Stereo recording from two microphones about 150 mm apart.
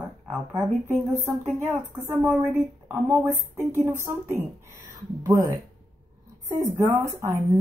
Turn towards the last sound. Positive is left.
turn(degrees=-20)  # may be behind; listen again after turning